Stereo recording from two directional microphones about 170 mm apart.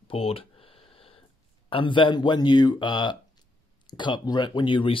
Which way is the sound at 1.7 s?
30° left (ahead or behind).